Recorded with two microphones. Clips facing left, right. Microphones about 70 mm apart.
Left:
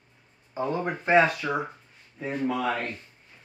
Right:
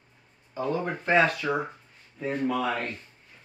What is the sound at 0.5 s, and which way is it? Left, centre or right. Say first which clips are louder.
Speech: even; centre.